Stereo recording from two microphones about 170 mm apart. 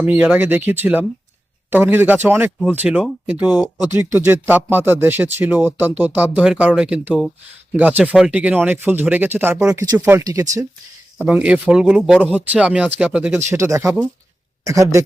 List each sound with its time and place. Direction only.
0.0 s speech: 10° right (ahead or behind)